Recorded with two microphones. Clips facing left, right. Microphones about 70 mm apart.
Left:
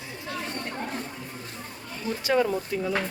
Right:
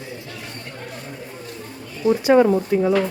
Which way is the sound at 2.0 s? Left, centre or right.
Right.